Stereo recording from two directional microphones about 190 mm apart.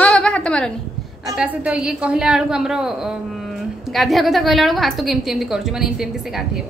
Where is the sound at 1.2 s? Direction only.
5° right (ahead or behind).